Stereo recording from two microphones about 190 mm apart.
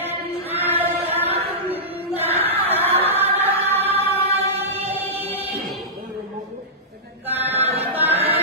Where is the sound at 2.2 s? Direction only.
30° right (ahead or behind).